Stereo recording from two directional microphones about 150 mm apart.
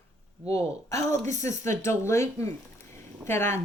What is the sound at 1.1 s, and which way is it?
Speech, 50° right (ahead or behind).